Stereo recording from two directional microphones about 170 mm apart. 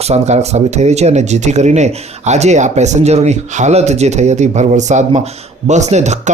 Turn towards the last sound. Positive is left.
turn(degrees=-40)  # may be behind; listen again after turning